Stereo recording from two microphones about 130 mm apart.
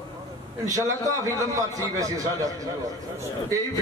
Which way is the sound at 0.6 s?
25° right (ahead or behind).